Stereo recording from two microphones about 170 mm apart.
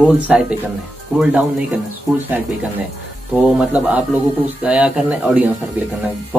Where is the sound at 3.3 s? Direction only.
5° right (ahead or behind).